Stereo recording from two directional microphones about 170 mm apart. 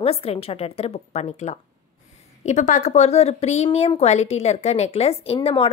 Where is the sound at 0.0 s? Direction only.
35° left (ahead or behind).